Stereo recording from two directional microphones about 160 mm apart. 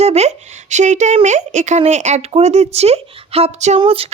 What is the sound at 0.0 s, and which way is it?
Speech, 40° right (ahead or behind).